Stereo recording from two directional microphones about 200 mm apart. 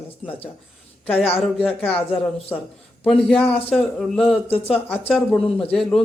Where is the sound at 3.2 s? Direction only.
5° left (ahead or behind).